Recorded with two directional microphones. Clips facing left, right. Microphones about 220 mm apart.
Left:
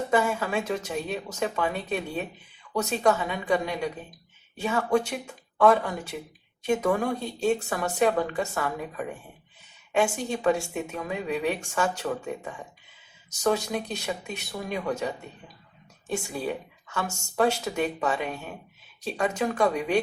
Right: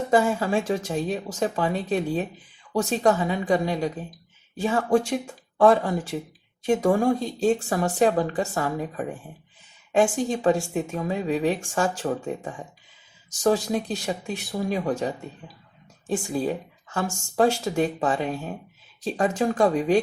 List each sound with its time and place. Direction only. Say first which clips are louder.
0.1 s a woman's voice: right 5 dB; 30° right (ahead or behind)
10.2 s a woman's voice: right 3 dB; 30° right (ahead or behind)